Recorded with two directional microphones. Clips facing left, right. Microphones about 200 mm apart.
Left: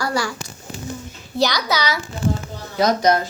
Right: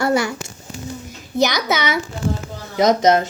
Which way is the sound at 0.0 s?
20° right (ahead or behind).